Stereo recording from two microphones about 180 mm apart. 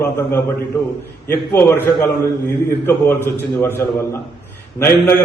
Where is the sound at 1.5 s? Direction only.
10° left (ahead or behind).